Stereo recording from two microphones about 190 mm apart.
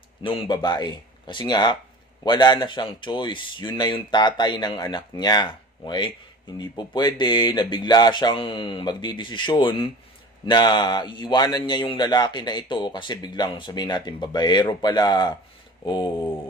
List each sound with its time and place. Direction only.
0.2 s a man's voice: 25° left (ahead or behind)